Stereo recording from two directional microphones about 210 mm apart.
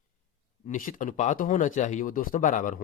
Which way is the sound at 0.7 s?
40° left (ahead or behind).